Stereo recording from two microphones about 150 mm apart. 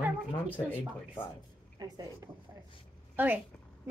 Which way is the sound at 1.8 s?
25° right (ahead or behind).